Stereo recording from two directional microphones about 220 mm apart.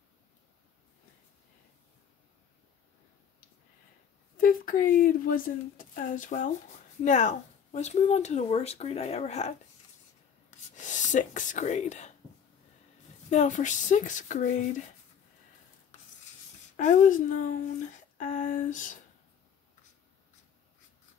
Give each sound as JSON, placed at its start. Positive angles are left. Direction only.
{"t": 4.4, "sound": "speech", "side_deg": 40}
{"t": 10.7, "sound": "speech", "side_deg": 35}
{"t": 13.3, "sound": "speech", "side_deg": 35}
{"t": 16.7, "sound": "speech", "side_deg": 35}